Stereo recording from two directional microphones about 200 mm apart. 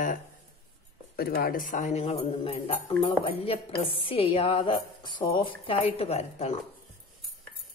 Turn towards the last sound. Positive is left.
turn(degrees=30)  # may be behind; listen again after turning